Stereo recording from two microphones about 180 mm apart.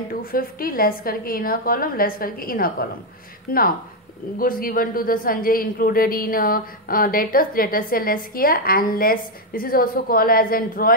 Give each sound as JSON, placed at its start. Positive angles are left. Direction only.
{"t": 0.1, "sound": "a woman's voice", "side_deg": 55}